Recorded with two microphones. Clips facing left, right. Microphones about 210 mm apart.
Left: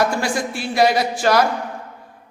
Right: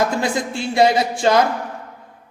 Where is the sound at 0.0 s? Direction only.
20° right (ahead or behind).